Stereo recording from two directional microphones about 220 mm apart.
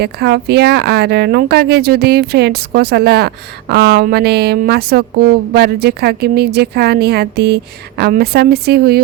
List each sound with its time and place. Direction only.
0.0 s speech: 45° right (ahead or behind)